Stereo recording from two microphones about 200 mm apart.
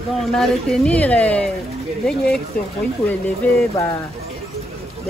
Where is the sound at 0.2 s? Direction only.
Centre (ahead or behind).